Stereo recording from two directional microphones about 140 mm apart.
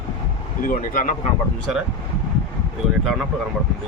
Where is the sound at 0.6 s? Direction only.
75° left (ahead or behind).